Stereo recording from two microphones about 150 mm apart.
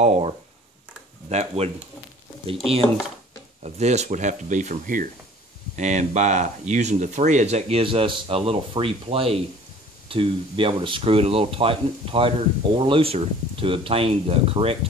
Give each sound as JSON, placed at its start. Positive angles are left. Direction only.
{"t": 0.0, "sound": "speech", "side_deg": -50}
{"t": 1.3, "sound": "speech", "side_deg": -45}
{"t": 3.6, "sound": "speech", "side_deg": -45}